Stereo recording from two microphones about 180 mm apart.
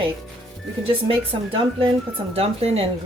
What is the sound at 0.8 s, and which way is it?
Speech, 30° right (ahead or behind).